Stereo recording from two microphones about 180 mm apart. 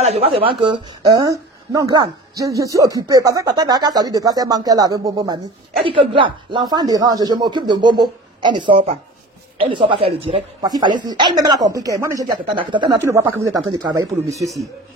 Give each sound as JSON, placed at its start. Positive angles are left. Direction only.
{"t": 0.0, "sound": "a woman's voice", "side_deg": -35}